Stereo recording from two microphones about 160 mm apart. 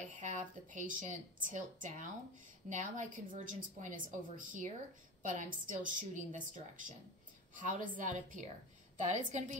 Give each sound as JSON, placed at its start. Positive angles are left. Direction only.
{"t": 0.1, "sound": "a woman's voice", "side_deg": -55}